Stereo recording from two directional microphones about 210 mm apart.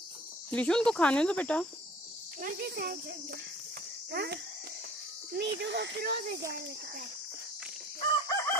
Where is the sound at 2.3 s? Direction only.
45° right (ahead or behind).